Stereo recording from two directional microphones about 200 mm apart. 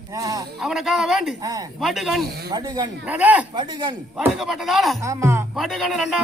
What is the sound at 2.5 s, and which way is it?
Speech, 20° right (ahead or behind).